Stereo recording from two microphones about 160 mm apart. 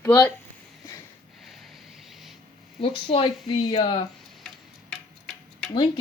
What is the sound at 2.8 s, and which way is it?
Speech, 35° left (ahead or behind).